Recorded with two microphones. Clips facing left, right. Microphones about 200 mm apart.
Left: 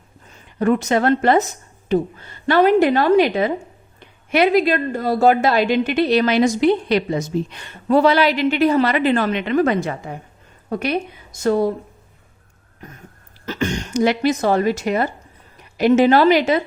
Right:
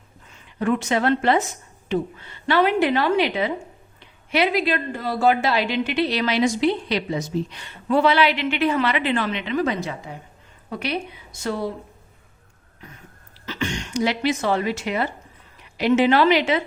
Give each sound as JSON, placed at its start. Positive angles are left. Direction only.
{"t": 0.3, "sound": "a woman's voice", "side_deg": 40}
{"t": 13.4, "sound": "a woman's voice", "side_deg": 45}